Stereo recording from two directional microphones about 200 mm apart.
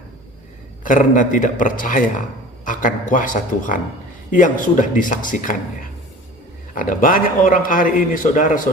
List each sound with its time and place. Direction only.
0.9 s speech: 40° left (ahead or behind)
6.7 s speech: 40° left (ahead or behind)